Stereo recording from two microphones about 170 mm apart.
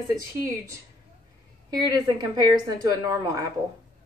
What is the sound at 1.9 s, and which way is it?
A woman's voice, 25° right (ahead or behind).